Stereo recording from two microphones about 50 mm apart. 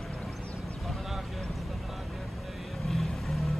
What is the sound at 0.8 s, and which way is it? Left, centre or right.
Vehicle, centre.